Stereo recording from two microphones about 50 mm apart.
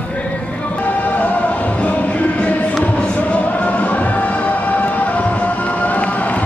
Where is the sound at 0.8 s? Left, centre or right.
Left.